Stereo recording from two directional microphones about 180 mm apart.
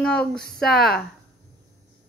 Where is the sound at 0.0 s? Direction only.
5° left (ahead or behind).